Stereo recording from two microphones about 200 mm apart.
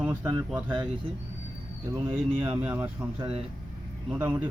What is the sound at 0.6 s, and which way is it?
Speech, 20° right (ahead or behind).